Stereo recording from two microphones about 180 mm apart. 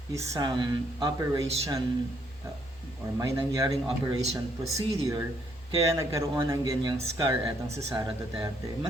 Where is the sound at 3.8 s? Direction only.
30° right (ahead or behind).